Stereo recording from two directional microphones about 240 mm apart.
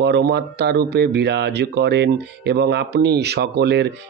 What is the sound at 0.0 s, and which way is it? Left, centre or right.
Speech, right.